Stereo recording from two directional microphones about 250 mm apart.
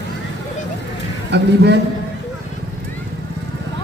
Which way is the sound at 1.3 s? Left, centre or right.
Right.